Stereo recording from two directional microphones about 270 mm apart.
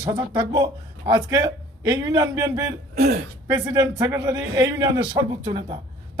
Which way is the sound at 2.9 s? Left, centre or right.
Right.